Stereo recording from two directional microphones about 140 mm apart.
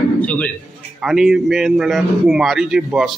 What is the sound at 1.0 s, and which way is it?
Speech, 5° right (ahead or behind).